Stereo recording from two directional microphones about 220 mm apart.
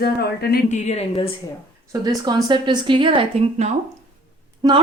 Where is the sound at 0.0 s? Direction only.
45° left (ahead or behind); by 1.3 s 25° left (ahead or behind).